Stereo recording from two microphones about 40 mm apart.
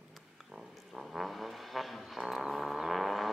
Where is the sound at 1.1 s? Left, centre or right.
Centre.